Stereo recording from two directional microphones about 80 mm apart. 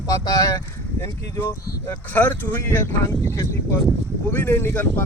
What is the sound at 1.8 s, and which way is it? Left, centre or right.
Speech, left.